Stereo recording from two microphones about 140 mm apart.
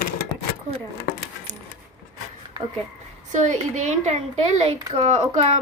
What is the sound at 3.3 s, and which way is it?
Speech, 60° right (ahead or behind).